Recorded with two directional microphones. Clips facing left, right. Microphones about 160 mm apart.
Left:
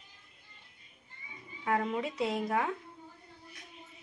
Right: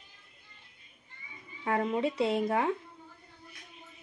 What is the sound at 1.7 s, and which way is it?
Speech, 30° right (ahead or behind).